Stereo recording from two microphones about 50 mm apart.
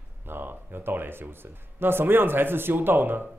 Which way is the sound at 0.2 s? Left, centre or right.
Right.